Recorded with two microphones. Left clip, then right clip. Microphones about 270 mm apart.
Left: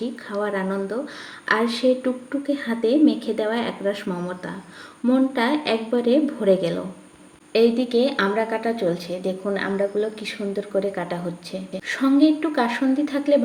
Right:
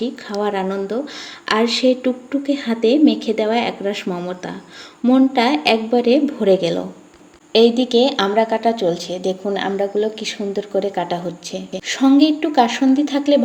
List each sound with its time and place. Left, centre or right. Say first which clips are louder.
0.0 s a woman's voice: right 5 dB; right